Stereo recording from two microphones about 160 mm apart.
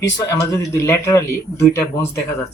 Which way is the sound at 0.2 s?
20° left (ahead or behind).